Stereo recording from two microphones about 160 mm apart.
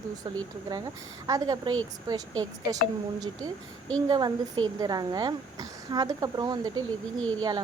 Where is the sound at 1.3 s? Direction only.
25° right (ahead or behind).